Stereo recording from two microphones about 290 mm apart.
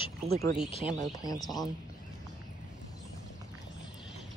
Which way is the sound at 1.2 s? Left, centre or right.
Centre.